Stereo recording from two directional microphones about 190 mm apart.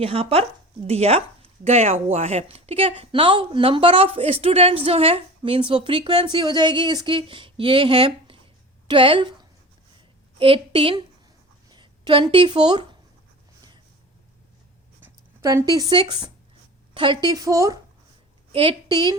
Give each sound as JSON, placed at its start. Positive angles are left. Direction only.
{"t": 0.0, "sound": "speech", "side_deg": -30}
{"t": 10.3, "sound": "a woman's voice", "side_deg": -30}
{"t": 15.0, "sound": "speech", "side_deg": -15}
{"t": 18.5, "sound": "a woman's voice", "side_deg": -30}